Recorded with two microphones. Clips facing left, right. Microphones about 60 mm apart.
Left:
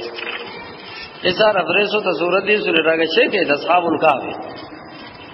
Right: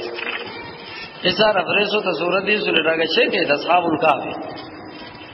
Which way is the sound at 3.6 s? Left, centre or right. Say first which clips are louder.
Left 1 dB; left.